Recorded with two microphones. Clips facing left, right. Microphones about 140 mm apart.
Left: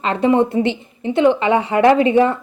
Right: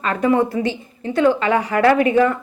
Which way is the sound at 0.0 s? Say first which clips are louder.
Left 2 dB; 25° left (ahead or behind).